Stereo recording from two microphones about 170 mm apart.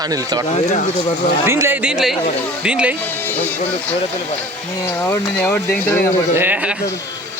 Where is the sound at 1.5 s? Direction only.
15° right (ahead or behind).